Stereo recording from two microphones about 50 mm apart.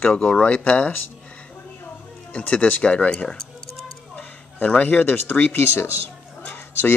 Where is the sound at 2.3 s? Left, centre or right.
Left.